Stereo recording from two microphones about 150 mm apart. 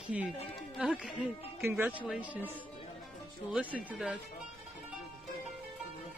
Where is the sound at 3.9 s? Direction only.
5° right (ahead or behind).